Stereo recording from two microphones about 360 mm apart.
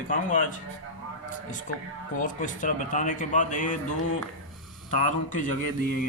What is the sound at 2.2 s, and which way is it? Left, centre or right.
Speech, left.